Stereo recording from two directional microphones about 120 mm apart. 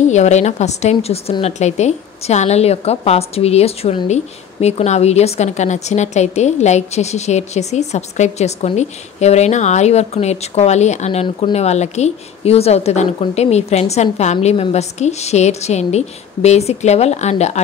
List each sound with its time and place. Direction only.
0.0 s a woman's voice: 75° left (ahead or behind); by 1.3 s 60° left (ahead or behind)
1.4 s a woman's voice: 70° left (ahead or behind)